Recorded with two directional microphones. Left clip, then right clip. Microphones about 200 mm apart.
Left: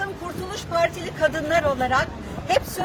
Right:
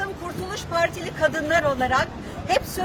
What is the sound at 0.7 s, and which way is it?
Speech, 10° right (ahead or behind).